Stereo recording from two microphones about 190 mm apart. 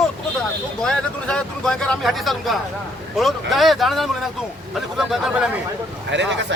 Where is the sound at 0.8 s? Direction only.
5° left (ahead or behind).